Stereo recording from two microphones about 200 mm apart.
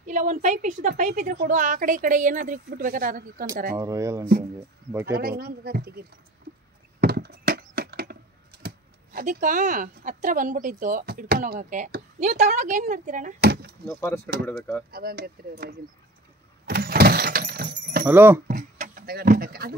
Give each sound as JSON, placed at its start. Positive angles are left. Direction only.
{"t": 0.0, "sound": "a woman's voice", "side_deg": -40}
{"t": 3.7, "sound": "speech", "side_deg": -15}
{"t": 5.1, "sound": "speech", "side_deg": -50}
{"t": 7.0, "sound": "wood", "side_deg": -50}
{"t": 8.6, "sound": "speech", "side_deg": -45}
{"t": 13.8, "sound": "speech", "side_deg": 10}
{"t": 14.9, "sound": "speech", "side_deg": -50}
{"t": 16.6, "sound": "vehicle", "side_deg": -50}
{"t": 18.0, "sound": "speech", "side_deg": -10}
{"t": 18.5, "sound": "a sound", "side_deg": -40}